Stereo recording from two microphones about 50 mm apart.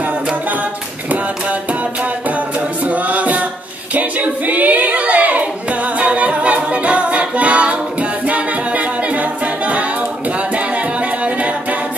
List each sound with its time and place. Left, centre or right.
1.1 s music: right
2.2 s a capella: right
3.9 s child singing: right
10.5 s music: right